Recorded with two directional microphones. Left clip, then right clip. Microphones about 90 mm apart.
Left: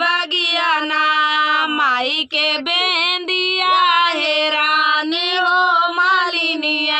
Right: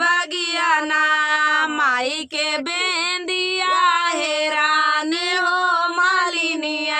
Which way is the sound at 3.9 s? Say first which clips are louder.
Left 4 dB; 45° right (ahead or behind).